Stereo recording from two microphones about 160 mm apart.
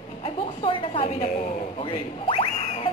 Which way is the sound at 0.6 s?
35° left (ahead or behind).